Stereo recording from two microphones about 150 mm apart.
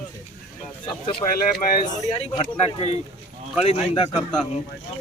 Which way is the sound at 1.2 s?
35° left (ahead or behind).